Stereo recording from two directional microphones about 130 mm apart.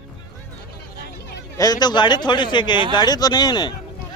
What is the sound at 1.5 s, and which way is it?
Speech, 30° left (ahead or behind).